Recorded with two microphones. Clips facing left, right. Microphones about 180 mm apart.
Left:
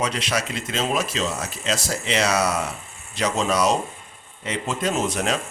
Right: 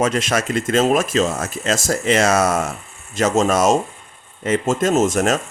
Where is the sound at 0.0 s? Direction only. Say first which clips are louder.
Right 6 dB; 50° right (ahead or behind).